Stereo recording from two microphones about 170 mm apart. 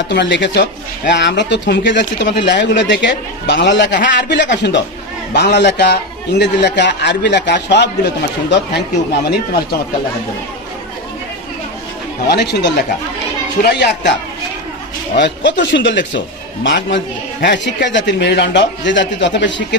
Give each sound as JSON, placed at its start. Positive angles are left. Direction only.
{"t": 0.1, "sound": "a man's voice", "side_deg": 90}
{"t": 12.3, "sound": "a man's voice", "side_deg": 80}
{"t": 15.1, "sound": "a man's voice", "side_deg": 90}